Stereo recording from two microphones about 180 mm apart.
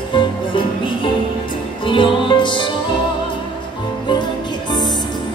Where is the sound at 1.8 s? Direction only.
30° left (ahead or behind).